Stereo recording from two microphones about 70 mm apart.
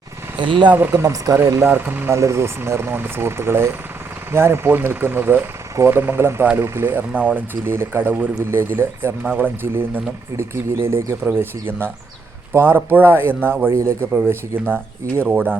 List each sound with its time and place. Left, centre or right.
0.3 s speech: right
0.7 s speech: right
1.0 s speech: right
1.6 s speech: right
2.1 s speech: right
12.5 s speech: right